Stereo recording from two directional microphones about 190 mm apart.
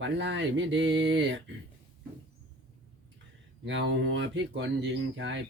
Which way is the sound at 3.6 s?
70° right (ahead or behind).